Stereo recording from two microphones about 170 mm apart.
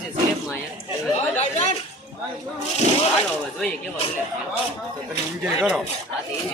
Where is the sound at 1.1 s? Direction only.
40° left (ahead or behind).